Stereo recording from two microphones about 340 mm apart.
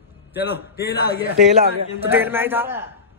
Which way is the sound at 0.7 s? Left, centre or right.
Left.